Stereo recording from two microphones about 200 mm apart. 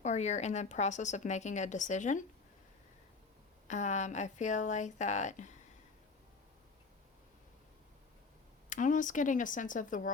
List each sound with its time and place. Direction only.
0.0 s a woman's voice: 35° left (ahead or behind)
3.7 s a woman's voice: 35° left (ahead or behind)
8.7 s a woman's voice: 40° left (ahead or behind)